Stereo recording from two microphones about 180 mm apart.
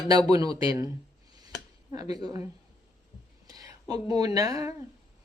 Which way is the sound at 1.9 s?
20° right (ahead or behind).